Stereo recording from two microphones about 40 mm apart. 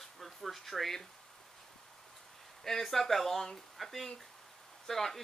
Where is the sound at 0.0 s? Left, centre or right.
Centre.